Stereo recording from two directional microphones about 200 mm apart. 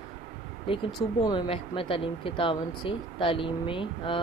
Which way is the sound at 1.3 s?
25° left (ahead or behind).